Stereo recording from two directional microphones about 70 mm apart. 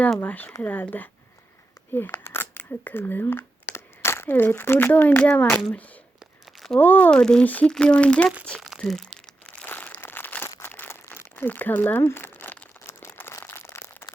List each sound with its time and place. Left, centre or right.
0.2 s speech: left
1.9 s speech: left; by 5.5 s centre
6.7 s speech: left
7.1 s speech: centre
7.4 s speech: left
7.7 s speech: centre
8.8 s speech: centre
9.6 s crumpling: left
12.8 s crumpling: left
13.4 s a sound: left